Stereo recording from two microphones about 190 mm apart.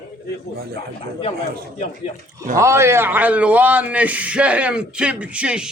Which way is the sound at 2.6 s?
15° right (ahead or behind).